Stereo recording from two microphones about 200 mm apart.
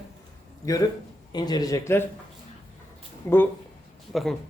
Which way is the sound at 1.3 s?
20° left (ahead or behind).